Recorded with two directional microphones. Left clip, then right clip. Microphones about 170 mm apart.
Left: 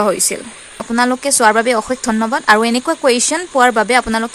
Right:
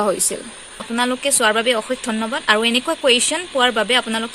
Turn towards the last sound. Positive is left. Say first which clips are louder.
# left 4 dB
turn(degrees=25)  # may be behind; listen again after turning